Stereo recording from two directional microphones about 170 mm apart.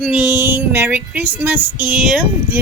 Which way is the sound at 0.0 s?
10° right (ahead or behind).